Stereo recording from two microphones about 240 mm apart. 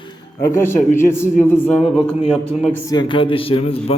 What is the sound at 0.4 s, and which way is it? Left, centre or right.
Speech, centre.